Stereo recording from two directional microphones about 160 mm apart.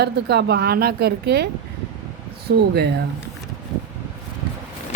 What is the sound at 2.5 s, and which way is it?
Speech, 90° right.